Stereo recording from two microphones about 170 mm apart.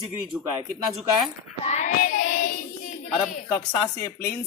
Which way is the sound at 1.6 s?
45° left (ahead or behind).